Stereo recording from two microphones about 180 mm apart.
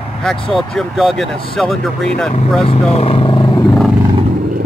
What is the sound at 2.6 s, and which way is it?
Speech, 35° left (ahead or behind).